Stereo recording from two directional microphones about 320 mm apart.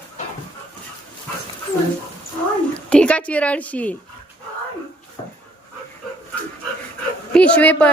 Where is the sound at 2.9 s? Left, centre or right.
Centre.